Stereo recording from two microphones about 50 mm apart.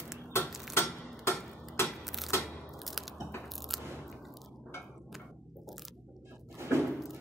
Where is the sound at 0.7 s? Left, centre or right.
Left.